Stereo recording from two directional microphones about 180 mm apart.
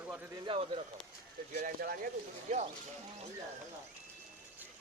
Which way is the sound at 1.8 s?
55° right (ahead or behind).